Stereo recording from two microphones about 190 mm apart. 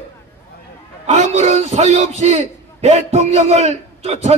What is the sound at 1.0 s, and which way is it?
A man's voice, 40° right (ahead or behind).